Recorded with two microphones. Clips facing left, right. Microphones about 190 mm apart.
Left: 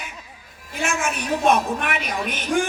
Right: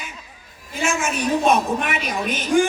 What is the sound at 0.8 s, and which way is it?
A woman's voice, 55° left (ahead or behind).